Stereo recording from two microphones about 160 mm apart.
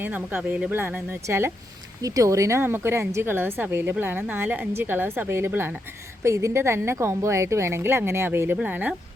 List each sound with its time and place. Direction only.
0.0 s speech: 10° right (ahead or behind)